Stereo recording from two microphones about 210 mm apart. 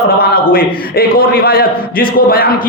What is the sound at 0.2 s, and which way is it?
Speech, 45° left (ahead or behind).